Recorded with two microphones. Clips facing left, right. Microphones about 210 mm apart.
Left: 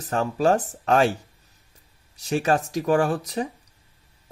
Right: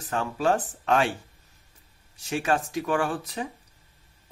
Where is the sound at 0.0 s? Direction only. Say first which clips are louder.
Left 4 dB; 40° left (ahead or behind).